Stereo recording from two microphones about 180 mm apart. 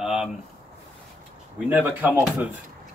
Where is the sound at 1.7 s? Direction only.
10° right (ahead or behind).